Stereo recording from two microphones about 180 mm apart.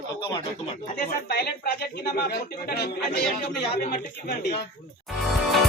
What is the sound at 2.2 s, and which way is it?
Speech, 65° left (ahead or behind).